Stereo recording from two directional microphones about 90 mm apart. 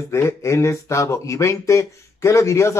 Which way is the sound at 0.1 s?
30° left (ahead or behind).